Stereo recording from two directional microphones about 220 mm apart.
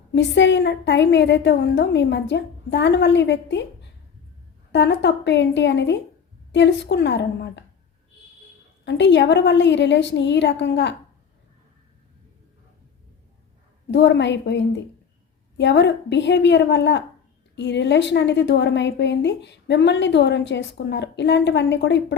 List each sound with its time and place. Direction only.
0.1 s a woman's voice: 55° left (ahead or behind)
4.7 s a woman's voice: 55° left (ahead or behind)
8.8 s a woman's voice: 50° left (ahead or behind)
13.9 s a woman's voice: 55° left (ahead or behind)